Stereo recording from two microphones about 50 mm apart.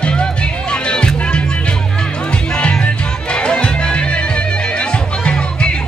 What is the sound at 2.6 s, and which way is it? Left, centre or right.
Music, left.